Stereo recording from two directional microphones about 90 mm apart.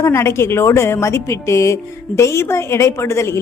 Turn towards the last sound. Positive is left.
turn(degrees=30)  # may be behind; listen again after turning